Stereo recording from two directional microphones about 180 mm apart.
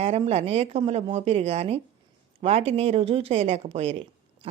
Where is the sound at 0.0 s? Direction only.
35° right (ahead or behind).